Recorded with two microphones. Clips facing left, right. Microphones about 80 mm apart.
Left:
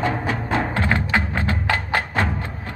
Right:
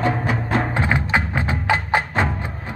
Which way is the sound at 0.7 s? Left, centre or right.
Centre.